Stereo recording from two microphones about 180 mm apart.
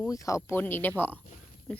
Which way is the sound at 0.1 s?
20° left (ahead or behind).